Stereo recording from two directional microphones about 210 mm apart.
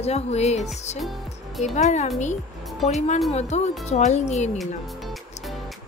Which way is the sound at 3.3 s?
30° left (ahead or behind).